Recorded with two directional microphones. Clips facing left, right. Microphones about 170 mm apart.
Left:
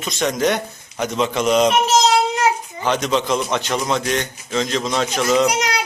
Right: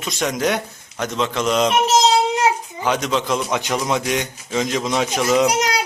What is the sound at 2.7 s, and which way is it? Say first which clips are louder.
Speech: left 1 dB; 5° right (ahead or behind).